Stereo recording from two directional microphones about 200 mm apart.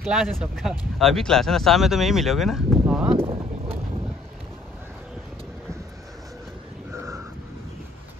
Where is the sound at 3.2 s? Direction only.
25° right (ahead or behind).